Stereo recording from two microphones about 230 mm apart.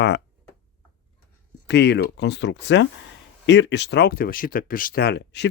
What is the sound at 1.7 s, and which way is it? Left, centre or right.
Speech, left.